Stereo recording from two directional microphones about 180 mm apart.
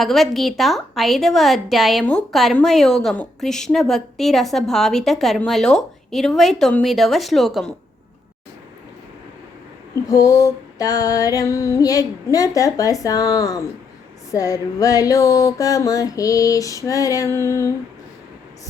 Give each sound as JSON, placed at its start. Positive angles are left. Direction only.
{"t": 0.0, "sound": "a woman's voice", "side_deg": 0}
{"t": 9.9, "sound": "female singing", "side_deg": 20}